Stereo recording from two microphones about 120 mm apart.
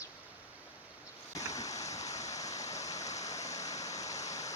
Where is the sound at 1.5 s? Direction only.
30° left (ahead or behind).